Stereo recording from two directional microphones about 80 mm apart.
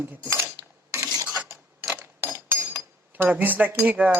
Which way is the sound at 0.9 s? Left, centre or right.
Right.